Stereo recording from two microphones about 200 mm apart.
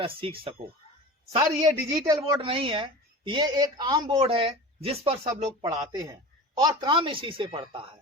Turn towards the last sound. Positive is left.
turn(degrees=-25)  # may be behind; listen again after turning